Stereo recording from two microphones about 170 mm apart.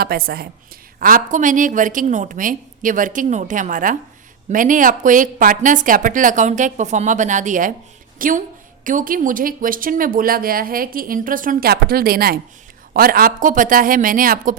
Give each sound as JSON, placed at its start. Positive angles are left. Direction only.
{"t": 0.0, "sound": "speech", "side_deg": -60}